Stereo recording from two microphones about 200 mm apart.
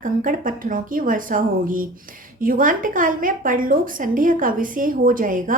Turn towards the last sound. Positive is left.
turn(degrees=-40)  # may be behind; listen again after turning